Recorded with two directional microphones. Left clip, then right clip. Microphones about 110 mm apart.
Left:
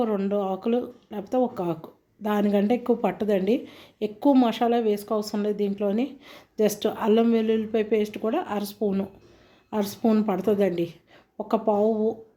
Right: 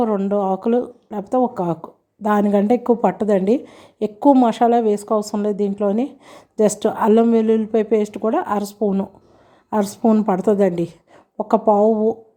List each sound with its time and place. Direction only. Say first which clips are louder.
0.3 s a woman's voice: right 7 dB; 45° right (ahead or behind)
10.0 s a woman's voice: right 5 dB; 30° right (ahead or behind)
10.2 s a woman's voice: right 7 dB; 45° right (ahead or behind)